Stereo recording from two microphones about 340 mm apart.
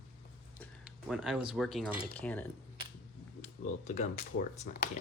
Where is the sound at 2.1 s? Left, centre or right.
Centre.